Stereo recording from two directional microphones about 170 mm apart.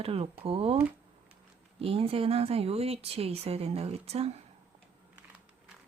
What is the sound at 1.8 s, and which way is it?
Speech, 35° right (ahead or behind).